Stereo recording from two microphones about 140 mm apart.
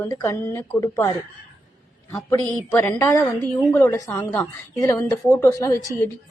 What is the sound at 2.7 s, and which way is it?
A woman's voice, 20° left (ahead or behind).